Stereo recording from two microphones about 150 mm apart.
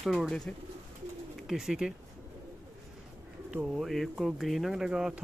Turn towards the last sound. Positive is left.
turn(degrees=-5)  # may be behind; listen again after turning